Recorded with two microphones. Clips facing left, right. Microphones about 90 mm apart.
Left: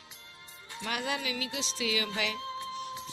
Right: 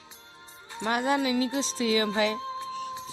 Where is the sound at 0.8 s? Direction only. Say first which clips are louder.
Right 8 dB; 30° right (ahead or behind).